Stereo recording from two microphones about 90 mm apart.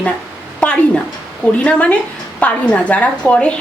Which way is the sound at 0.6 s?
10° left (ahead or behind).